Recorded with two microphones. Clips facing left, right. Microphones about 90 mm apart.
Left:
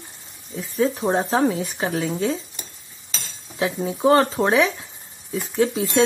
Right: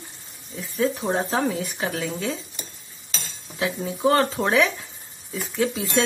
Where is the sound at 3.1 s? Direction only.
30° left (ahead or behind).